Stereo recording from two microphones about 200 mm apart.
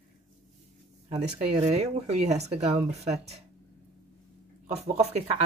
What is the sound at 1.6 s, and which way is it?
Speech, 35° right (ahead or behind).